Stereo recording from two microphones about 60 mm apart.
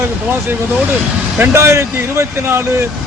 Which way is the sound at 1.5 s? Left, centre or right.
Right.